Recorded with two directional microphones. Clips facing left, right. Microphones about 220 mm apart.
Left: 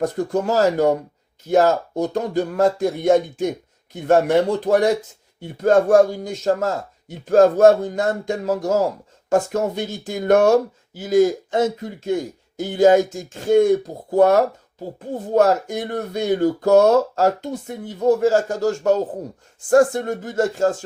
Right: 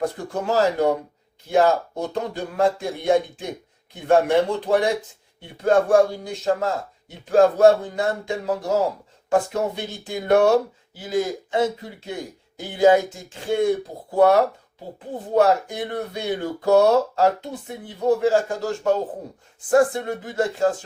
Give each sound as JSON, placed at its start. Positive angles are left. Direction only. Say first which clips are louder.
{"t": 0.2, "sound": "speech", "louder": "left 4 dB", "side_deg": 40}
{"t": 4.6, "sound": "speech", "louder": "left 3 dB", "side_deg": 45}